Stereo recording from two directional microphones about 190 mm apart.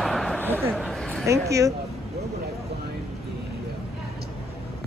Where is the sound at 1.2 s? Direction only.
15° right (ahead or behind).